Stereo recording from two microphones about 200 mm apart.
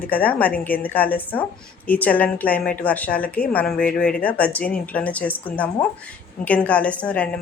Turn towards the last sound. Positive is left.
turn(degrees=5)  # may be behind; listen again after turning